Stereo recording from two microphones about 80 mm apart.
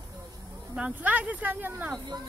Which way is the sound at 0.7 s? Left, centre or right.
Centre.